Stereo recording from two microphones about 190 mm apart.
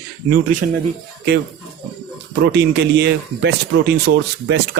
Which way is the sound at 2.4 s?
65° right (ahead or behind).